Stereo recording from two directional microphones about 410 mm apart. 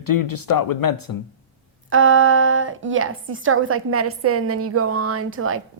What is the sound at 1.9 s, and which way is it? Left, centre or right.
A woman's voice, right.